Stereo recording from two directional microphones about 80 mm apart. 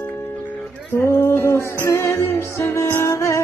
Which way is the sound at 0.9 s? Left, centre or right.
Left.